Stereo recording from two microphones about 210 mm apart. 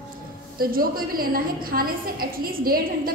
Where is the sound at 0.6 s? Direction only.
45° right (ahead or behind).